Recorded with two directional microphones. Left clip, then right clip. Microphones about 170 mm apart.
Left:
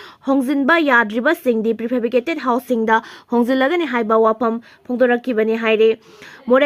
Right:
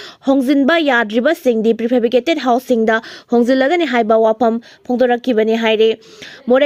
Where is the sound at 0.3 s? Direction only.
30° right (ahead or behind).